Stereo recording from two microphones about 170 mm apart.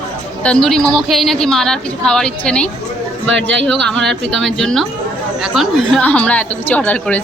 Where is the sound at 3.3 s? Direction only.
90° right.